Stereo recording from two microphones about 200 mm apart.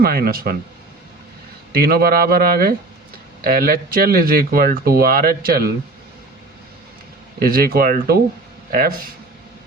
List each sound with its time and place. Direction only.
0.0 s speech: 50° right (ahead or behind)
1.7 s speech: 50° right (ahead or behind)
7.4 s speech: 45° right (ahead or behind)